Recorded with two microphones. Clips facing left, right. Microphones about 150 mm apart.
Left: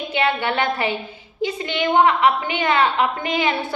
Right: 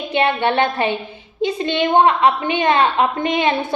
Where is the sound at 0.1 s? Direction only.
25° right (ahead or behind).